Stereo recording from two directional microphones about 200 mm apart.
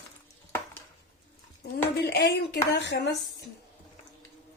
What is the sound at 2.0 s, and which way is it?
Speech, 60° left (ahead or behind).